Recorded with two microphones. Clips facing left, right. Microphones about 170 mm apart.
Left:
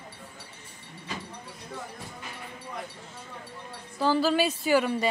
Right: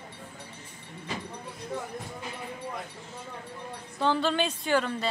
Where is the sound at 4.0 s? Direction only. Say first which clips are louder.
Left 2 dB; 5° left (ahead or behind).